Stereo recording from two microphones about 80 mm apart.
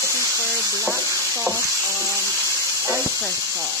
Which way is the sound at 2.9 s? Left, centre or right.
Right.